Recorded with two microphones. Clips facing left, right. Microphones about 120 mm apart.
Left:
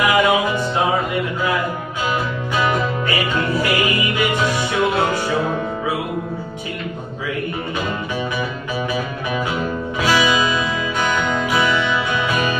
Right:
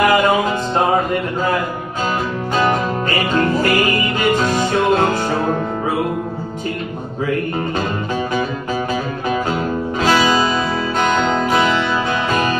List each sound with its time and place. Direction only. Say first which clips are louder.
0.0 s music: right 3 dB; 45° right (ahead or behind)
2.5 s music: right 2 dB; 45° right (ahead or behind)